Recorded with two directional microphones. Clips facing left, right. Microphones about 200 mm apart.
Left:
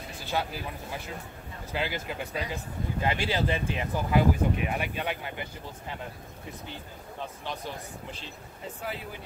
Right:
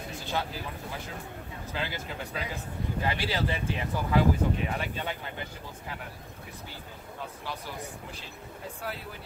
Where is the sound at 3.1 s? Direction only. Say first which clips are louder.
Left 3 dB; 20° left (ahead or behind).